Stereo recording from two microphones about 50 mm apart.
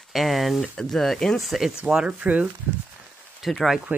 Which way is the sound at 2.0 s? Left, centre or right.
Right.